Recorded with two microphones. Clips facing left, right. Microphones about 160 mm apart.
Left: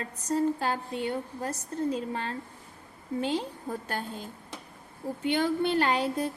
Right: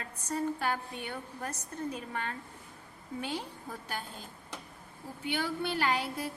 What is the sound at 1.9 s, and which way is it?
Speech, 30° left (ahead or behind).